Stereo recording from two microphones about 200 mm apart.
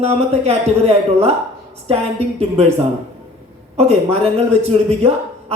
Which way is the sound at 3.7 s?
30° right (ahead or behind).